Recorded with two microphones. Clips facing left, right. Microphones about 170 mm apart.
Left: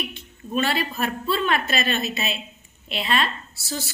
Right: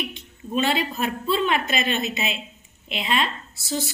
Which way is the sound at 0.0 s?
20° right (ahead or behind).